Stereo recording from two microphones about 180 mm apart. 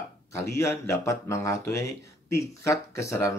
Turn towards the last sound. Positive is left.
turn(degrees=15)  # may be behind; listen again after turning